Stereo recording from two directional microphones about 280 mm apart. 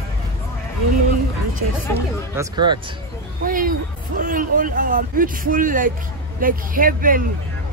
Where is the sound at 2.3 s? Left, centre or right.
Centre.